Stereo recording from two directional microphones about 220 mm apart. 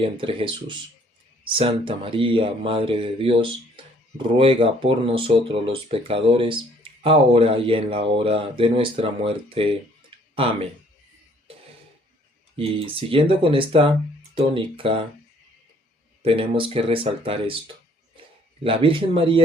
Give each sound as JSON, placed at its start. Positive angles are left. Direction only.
{"t": 0.0, "sound": "speech", "side_deg": -25}
{"t": 12.5, "sound": "speech", "side_deg": -25}
{"t": 16.2, "sound": "speech", "side_deg": -25}
{"t": 18.6, "sound": "speech", "side_deg": -25}